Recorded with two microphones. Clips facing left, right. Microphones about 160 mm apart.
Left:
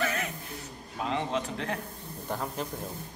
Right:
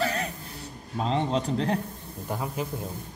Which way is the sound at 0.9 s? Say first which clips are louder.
Right 4 dB; 30° right (ahead or behind).